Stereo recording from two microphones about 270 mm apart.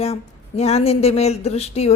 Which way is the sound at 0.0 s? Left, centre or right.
Left.